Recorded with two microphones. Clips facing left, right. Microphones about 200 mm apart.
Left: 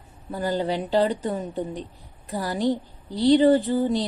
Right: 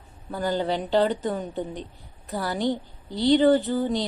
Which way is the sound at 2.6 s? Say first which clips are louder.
Left 5 dB; 35° left (ahead or behind).